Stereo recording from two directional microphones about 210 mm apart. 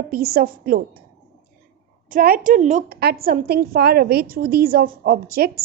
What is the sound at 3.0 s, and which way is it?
A woman's voice, 45° right (ahead or behind).